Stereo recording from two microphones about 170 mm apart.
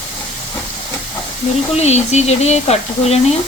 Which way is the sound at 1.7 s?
40° left (ahead or behind).